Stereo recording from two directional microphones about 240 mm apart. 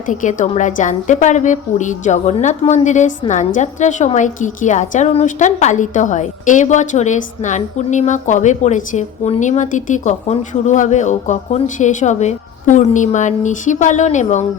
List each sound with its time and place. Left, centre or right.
0.1 s a woman's voice: left